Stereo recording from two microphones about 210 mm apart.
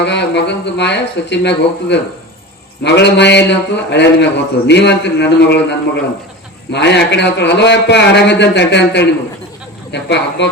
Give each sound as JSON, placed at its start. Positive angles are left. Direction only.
{"t": 0.0, "sound": "a man's voice", "side_deg": 55}